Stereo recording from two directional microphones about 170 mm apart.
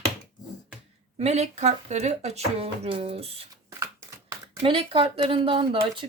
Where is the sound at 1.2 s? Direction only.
40° right (ahead or behind).